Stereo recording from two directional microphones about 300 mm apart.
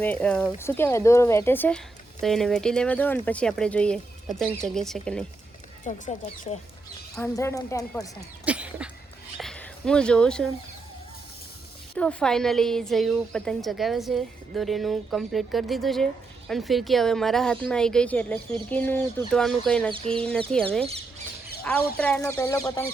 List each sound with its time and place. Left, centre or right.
0.0 s a woman's voice: centre
5.8 s speech: left
7.2 s speech: centre
8.4 s a sound: centre
9.4 s speech: centre
11.9 s a woman's voice: centre
21.9 s speech: centre